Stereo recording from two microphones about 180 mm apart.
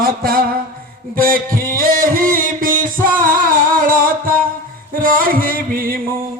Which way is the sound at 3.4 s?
50° right (ahead or behind).